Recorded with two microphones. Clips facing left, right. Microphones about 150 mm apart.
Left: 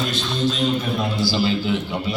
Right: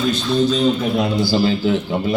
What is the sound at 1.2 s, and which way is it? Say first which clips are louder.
Speech: right 2 dB; 45° right (ahead or behind).